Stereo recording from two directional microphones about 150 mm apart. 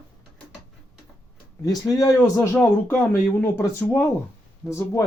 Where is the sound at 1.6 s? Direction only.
25° left (ahead or behind).